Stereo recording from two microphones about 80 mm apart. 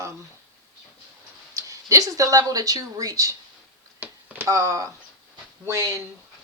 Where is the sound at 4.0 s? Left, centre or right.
Right.